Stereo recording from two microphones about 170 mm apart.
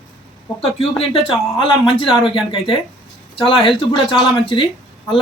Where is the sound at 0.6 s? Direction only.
35° left (ahead or behind).